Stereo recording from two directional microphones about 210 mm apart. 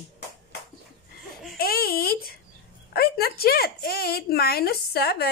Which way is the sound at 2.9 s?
45° left (ahead or behind).